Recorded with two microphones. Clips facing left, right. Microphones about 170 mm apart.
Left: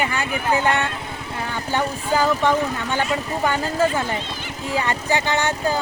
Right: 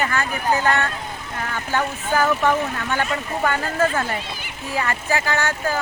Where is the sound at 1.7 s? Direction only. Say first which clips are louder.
Even; 15° left (ahead or behind).